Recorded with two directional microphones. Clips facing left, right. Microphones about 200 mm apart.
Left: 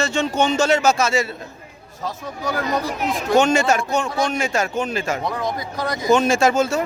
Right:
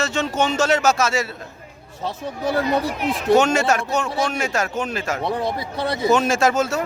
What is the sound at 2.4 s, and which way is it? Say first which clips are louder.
Speech: right 3 dB; 30° right (ahead or behind).